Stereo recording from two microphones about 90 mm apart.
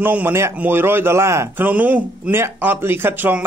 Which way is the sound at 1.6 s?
15° right (ahead or behind).